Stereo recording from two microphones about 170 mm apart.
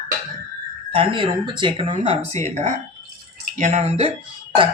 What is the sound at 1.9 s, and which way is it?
Speech, 40° right (ahead or behind).